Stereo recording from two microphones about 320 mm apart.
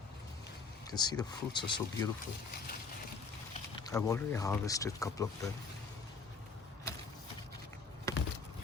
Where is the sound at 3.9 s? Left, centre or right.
Centre.